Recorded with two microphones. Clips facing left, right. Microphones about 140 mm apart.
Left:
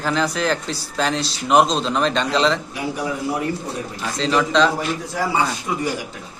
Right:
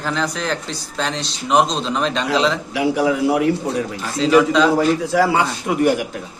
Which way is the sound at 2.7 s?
90° right.